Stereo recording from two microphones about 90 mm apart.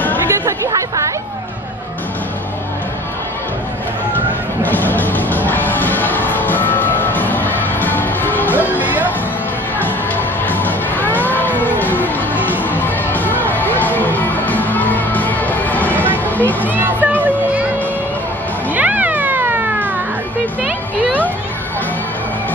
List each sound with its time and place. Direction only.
0.3 s music: 35° right (ahead or behind)
4.6 s music: 20° left (ahead or behind)
8.5 s music: 20° right (ahead or behind)
10.4 s music: 20° left (ahead or behind)
16.6 s a sound: 20° right (ahead or behind)
18.7 s cat: 15° right (ahead or behind)